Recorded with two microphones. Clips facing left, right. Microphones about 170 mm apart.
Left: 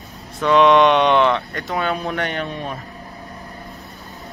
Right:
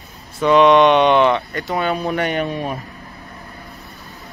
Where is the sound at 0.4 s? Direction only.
Centre (ahead or behind).